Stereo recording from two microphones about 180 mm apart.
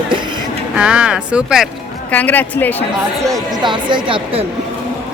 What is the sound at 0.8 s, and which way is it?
Speech, 5° right (ahead or behind).